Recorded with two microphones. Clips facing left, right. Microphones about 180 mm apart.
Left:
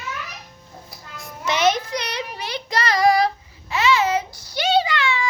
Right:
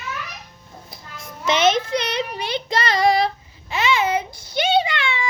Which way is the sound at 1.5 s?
25° right (ahead or behind).